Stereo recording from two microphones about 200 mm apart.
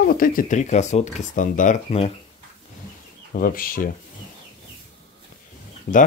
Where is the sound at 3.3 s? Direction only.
45° left (ahead or behind).